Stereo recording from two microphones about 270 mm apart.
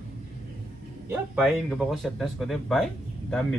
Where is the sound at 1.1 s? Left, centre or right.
Centre.